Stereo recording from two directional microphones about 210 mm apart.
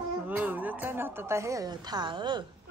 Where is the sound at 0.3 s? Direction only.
10° right (ahead or behind).